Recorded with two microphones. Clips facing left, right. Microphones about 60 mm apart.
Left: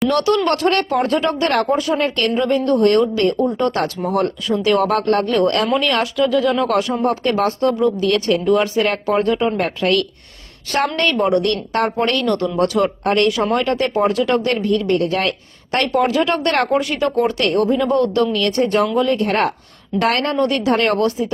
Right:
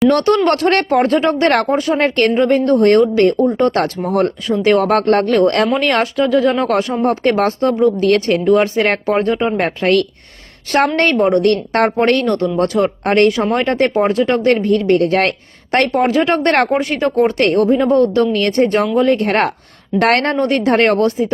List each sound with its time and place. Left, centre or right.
0.1 s a woman's voice: right